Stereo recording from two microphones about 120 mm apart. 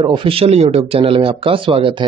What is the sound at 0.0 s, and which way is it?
Speech, 45° right (ahead or behind).